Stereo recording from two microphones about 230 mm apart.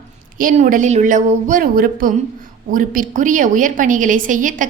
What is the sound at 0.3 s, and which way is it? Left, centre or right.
A woman's voice, right.